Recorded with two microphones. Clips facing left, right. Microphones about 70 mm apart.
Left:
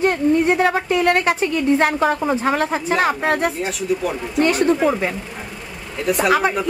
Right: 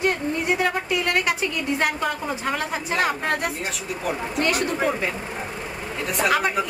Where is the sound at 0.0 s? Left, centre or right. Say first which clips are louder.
Left 8 dB; left.